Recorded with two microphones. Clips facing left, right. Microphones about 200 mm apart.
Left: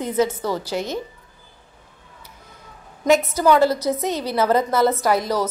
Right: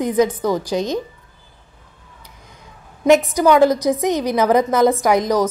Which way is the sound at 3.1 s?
15° right (ahead or behind).